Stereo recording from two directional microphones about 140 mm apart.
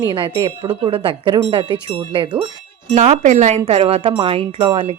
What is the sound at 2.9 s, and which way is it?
Speech, 60° right (ahead or behind).